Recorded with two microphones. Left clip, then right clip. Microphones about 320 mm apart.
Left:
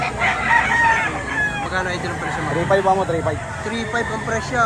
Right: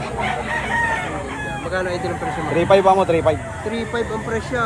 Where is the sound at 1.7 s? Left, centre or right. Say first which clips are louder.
Even; centre.